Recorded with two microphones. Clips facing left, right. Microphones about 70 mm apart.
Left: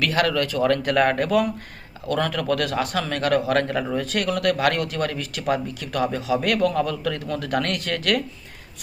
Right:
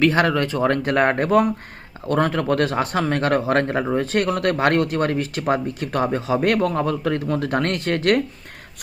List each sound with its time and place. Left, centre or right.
0.0 s speech: right